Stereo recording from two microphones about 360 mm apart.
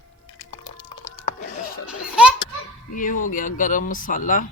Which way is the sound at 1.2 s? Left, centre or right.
Left.